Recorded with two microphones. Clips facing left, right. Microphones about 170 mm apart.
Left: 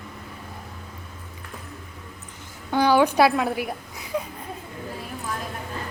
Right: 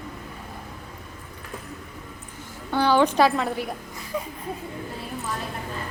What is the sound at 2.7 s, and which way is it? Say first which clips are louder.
Speech: left 1 dB; 10° left (ahead or behind).